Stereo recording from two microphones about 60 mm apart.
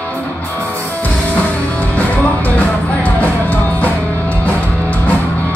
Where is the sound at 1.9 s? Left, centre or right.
Left.